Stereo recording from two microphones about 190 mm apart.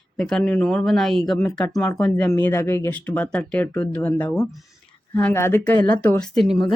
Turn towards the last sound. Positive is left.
turn(degrees=0)  # may be behind; listen again after turning